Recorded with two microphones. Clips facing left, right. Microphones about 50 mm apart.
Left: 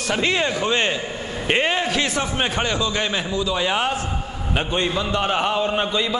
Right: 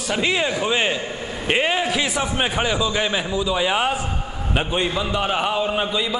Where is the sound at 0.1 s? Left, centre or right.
Centre.